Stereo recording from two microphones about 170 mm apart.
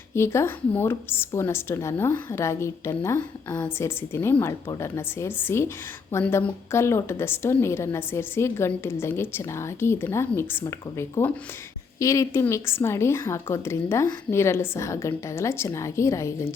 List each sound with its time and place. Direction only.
0.1 s a woman's voice: 15° left (ahead or behind)